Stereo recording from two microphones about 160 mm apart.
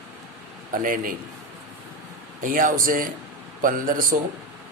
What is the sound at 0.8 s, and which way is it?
Speech, 60° right (ahead or behind).